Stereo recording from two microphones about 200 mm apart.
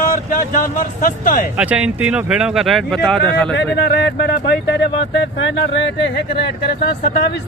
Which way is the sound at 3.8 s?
55° left (ahead or behind).